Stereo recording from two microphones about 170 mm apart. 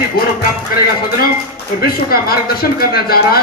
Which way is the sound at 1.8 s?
65° left (ahead or behind).